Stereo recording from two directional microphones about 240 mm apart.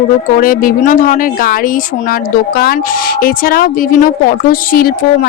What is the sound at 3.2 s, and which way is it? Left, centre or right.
Speech, left.